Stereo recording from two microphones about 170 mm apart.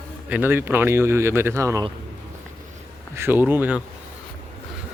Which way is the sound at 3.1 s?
10° right (ahead or behind).